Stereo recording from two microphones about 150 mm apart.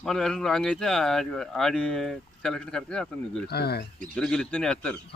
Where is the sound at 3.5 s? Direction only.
90° left.